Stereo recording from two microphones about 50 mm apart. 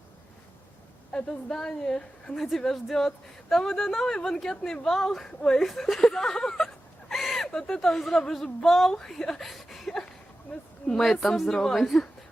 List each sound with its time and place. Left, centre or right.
1.1 s a woman's voice: centre
7.1 s a sound: centre
7.4 s a woman's voice: centre
10.8 s speech: centre